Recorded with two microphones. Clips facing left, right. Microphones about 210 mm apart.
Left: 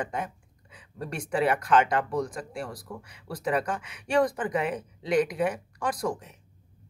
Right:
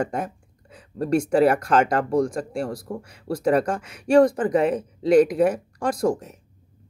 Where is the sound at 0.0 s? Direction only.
45° right (ahead or behind).